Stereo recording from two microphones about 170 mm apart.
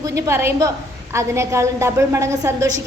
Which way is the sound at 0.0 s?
15° right (ahead or behind).